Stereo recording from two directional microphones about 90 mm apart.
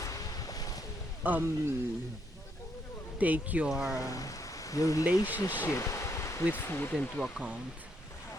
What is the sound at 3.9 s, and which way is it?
Speech, 40° left (ahead or behind).